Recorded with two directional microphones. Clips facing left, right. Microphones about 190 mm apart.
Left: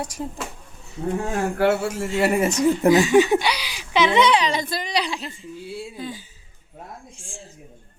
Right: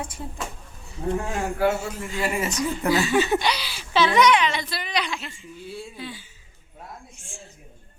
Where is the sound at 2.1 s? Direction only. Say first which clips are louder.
Left 7 dB; 65° left (ahead or behind).